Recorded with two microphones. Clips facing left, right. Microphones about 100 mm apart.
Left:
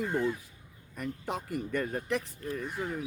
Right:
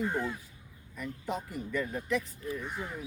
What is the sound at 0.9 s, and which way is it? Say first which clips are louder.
Speech: left 1 dB; 60° left (ahead or behind).